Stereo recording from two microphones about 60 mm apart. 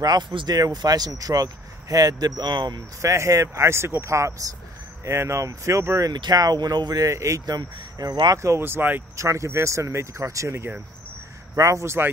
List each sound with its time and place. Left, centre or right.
0.6 s speech: right
3.0 s speech: right
3.6 s speech: right
5.0 s speech: right
6.0 s speech: right
8.5 s speech: right
9.1 s speech: right